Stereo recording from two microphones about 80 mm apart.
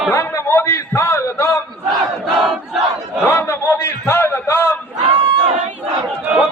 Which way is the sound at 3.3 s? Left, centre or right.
Left.